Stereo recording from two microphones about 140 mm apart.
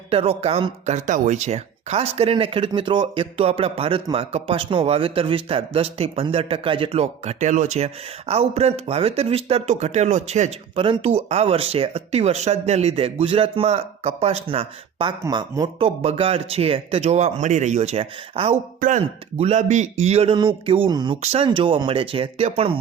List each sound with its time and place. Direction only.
0.1 s speech: 45° right (ahead or behind)
10.8 s speech: 40° right (ahead or behind)
15.2 s speech: 25° right (ahead or behind)
16.0 s speech: 45° right (ahead or behind)
18.8 s speech: 65° right (ahead or behind)
19.4 s speech: 50° right (ahead or behind)
20.3 s speech: 35° right (ahead or behind)